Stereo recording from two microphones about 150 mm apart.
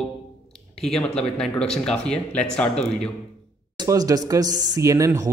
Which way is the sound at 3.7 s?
25° right (ahead or behind).